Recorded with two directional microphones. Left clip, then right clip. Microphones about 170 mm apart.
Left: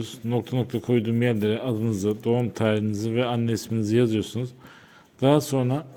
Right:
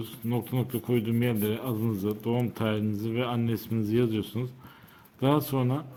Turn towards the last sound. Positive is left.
turn(degrees=25)  # may be behind; listen again after turning